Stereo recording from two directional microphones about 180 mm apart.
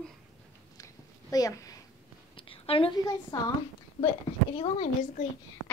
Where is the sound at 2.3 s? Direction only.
30° left (ahead or behind).